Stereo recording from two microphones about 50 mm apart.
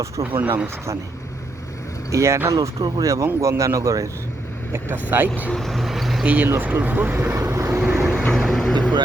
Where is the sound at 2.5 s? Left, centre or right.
Right.